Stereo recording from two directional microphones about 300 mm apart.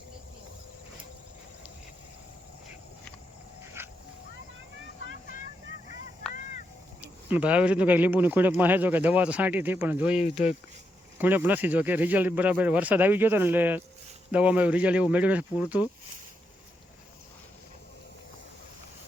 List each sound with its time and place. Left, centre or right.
3.8 s dog: centre
7.0 s speech: centre
10.2 s speech: left
11.2 s speech: centre